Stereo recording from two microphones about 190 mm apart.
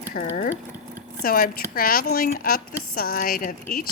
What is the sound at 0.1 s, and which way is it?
Speech, 55° left (ahead or behind).